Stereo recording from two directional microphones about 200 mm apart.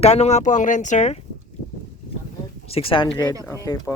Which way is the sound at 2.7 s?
25° left (ahead or behind).